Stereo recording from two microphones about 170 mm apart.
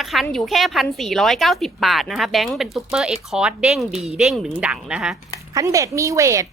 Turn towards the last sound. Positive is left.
turn(degrees=-20)  # may be behind; listen again after turning